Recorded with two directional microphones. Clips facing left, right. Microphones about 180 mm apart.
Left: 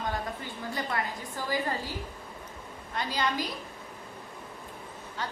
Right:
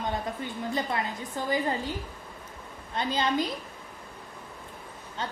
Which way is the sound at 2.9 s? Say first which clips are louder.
Right 3 dB; 25° right (ahead or behind).